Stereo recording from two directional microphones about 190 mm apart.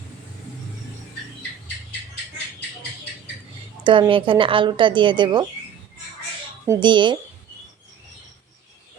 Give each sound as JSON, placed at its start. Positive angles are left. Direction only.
{"t": 3.8, "sound": "speech", "side_deg": -25}
{"t": 6.7, "sound": "speech", "side_deg": -25}